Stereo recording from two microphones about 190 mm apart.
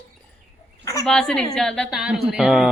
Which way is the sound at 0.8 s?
15° left (ahead or behind).